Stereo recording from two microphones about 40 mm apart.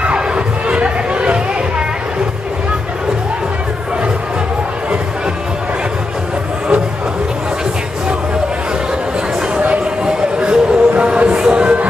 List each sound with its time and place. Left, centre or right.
0.0 s crowd: right
10.4 s music: right